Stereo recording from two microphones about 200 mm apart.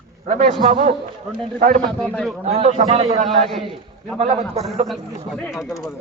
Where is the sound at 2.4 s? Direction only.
30° right (ahead or behind).